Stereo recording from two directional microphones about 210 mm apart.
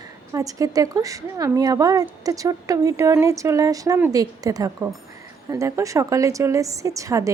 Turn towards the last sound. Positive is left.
turn(degrees=-15)  # may be behind; listen again after turning